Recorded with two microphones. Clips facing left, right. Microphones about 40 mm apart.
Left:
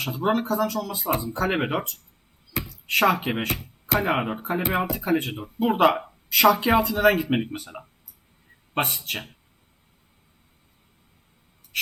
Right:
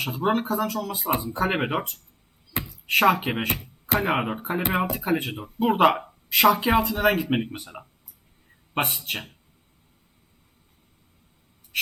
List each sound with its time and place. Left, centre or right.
0.0 s speech: centre
1.1 s speech: right; by 1.9 s centre
2.6 s a sound: centre
3.3 s speech: centre